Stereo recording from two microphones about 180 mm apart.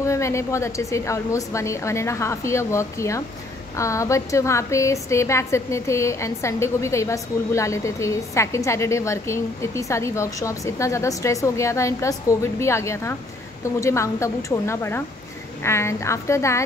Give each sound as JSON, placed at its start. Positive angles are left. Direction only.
{"t": 0.0, "sound": "a woman's voice", "side_deg": 15}